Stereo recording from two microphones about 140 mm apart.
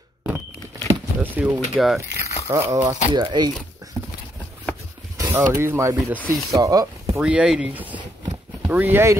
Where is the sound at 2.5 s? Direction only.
30° right (ahead or behind).